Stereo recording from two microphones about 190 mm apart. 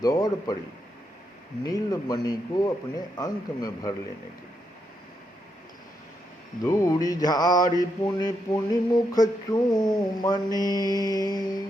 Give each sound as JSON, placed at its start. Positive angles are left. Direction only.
{"t": 0.0, "sound": "mantra", "side_deg": 20}
{"t": 1.6, "sound": "mantra", "side_deg": 20}
{"t": 6.6, "sound": "mantra", "side_deg": 15}